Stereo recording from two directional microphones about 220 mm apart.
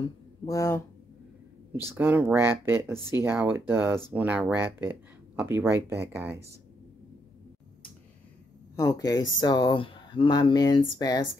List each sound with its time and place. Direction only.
0.0 s speech: 15° left (ahead or behind)
2.0 s speech: 10° right (ahead or behind)
8.7 s speech: 15° left (ahead or behind)